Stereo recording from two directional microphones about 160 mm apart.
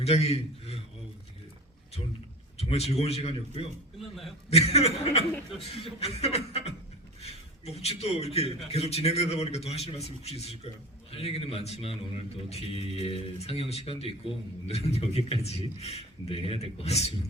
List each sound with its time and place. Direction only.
0.0 s a man's voice: 40° left (ahead or behind)
2.6 s a man's voice: 40° left (ahead or behind)
3.9 s a man's voice: centre (ahead or behind)
4.4 s a man's voice: 40° left (ahead or behind)